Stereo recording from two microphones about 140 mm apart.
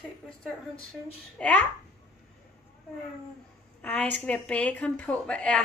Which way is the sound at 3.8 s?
10° left (ahead or behind).